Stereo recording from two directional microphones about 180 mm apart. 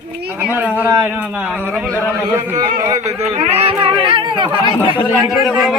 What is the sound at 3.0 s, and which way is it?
Speech, 40° right (ahead or behind).